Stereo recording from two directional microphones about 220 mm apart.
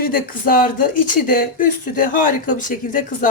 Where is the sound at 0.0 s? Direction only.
40° left (ahead or behind).